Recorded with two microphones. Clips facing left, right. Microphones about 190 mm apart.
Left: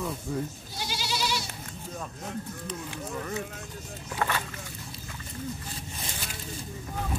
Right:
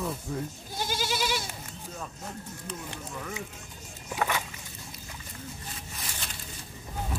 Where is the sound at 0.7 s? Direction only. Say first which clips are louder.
Right 3 dB; 50° right (ahead or behind).